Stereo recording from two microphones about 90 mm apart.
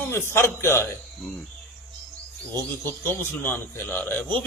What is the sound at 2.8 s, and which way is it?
A man's voice, 25° left (ahead or behind).